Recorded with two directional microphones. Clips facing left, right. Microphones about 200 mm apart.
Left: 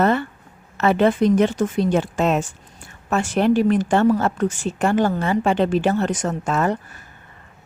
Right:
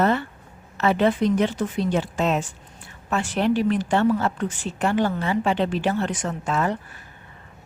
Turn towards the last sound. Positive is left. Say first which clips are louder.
# left 3 dB
turn(degrees=45)  # may be behind; listen again after turning